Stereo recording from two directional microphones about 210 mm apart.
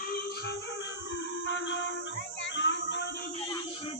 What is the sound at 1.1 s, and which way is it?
Music, 60° left (ahead or behind).